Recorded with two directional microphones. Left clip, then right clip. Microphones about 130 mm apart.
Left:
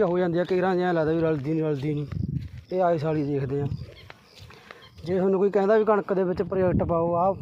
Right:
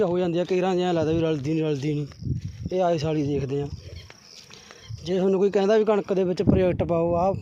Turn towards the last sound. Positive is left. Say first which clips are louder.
# right 1 dB
turn(degrees=-50)  # may be behind; listen again after turning